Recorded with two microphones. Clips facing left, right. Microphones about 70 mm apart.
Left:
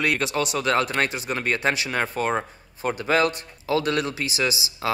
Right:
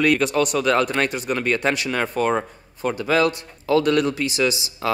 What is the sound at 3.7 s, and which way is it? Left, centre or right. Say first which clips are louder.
Speech: right 5 dB; centre.